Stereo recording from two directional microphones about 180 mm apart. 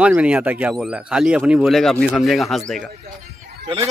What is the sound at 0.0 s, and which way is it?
Speech, 5° right (ahead or behind).